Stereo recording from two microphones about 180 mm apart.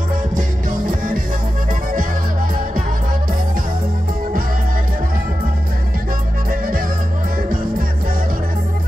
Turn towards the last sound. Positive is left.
turn(degrees=-50)  # may be behind; listen again after turning